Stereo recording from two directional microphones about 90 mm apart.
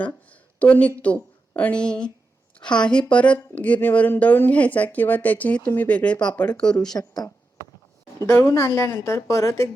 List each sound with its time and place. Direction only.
0.3 s a sound: 15° left (ahead or behind)
1.0 s speech: 15° left (ahead or behind)
8.2 s a woman's voice: 35° left (ahead or behind)